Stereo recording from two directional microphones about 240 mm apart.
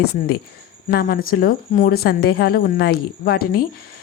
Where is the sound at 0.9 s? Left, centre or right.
Left.